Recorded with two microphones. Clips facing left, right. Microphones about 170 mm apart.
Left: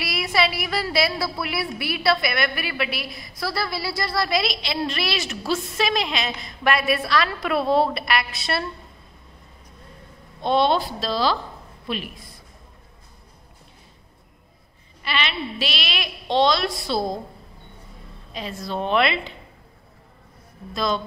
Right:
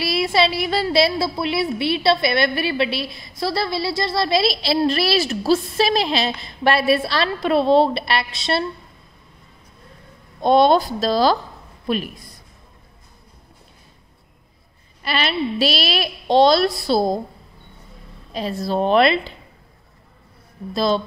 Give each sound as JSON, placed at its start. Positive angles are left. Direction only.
{"t": 0.0, "sound": "a woman's voice", "side_deg": -30}
{"t": 10.4, "sound": "speech", "side_deg": -45}
{"t": 15.0, "sound": "a woman's voice", "side_deg": -40}
{"t": 18.3, "sound": "a woman's voice", "side_deg": -35}
{"t": 20.7, "sound": "a woman's voice", "side_deg": -30}